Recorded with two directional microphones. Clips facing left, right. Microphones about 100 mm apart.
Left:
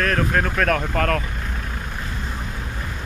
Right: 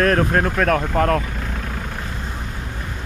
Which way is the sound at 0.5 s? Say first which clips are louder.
Right 3 dB; 20° right (ahead or behind).